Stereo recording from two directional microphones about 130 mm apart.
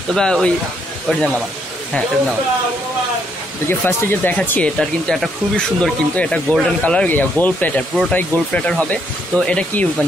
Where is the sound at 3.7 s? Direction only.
15° left (ahead or behind).